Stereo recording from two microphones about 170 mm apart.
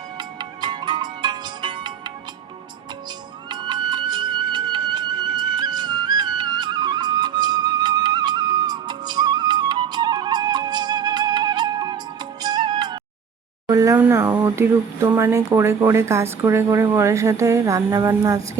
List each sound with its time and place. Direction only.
0.2 s music: 25° right (ahead or behind)
3.5 s music: 25° right (ahead or behind)
13.7 s speech: 15° right (ahead or behind)